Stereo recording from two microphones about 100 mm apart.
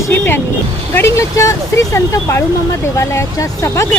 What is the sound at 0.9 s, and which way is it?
Speech, 30° left (ahead or behind).